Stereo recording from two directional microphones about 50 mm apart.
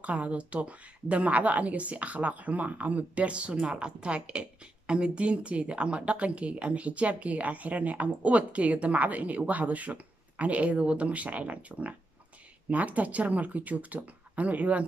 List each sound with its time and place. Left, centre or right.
0.0 s a woman's voice: right